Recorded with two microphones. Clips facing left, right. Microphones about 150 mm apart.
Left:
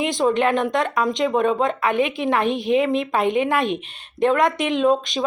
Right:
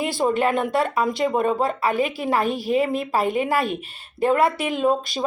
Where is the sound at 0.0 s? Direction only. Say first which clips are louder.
Left 2 dB; 5° right (ahead or behind).